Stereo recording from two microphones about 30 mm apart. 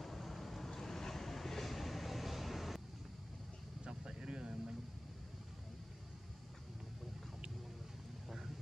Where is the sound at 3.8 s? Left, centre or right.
Right.